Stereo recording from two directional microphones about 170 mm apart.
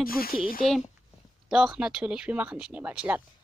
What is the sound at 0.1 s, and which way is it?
Speech, 60° left (ahead or behind).